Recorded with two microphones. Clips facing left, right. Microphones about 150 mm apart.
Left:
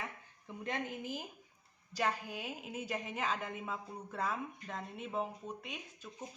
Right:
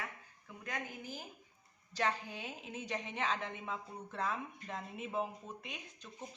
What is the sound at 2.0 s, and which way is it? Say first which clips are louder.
A woman's voice: left 1 dB; 5° left (ahead or behind).